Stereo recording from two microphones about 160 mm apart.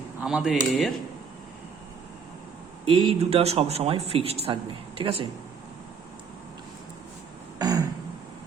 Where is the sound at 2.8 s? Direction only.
35° right (ahead or behind).